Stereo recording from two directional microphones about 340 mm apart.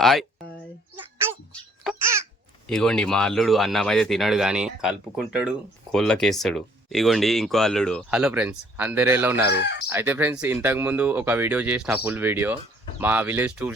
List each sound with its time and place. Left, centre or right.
0.0 s a sound: centre
0.9 s babbling: centre
2.6 s speech: centre